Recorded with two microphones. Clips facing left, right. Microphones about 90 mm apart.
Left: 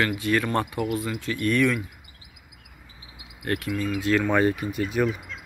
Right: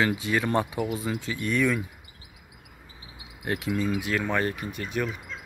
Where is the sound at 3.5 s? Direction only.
20° right (ahead or behind).